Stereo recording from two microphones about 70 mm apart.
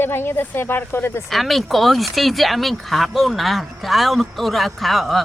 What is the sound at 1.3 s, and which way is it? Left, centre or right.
Speech, centre.